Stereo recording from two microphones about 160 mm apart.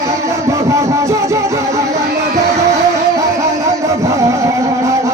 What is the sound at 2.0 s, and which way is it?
Music, 90° right.